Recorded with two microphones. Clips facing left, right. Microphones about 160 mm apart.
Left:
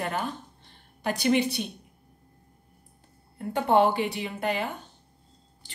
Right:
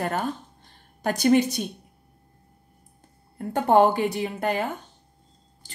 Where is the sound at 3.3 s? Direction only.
45° right (ahead or behind).